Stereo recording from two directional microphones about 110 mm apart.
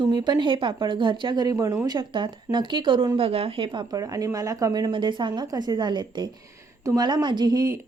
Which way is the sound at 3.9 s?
30° right (ahead or behind).